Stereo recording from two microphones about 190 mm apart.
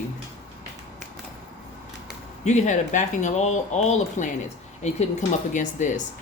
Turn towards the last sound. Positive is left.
turn(degrees=40)  # may be behind; listen again after turning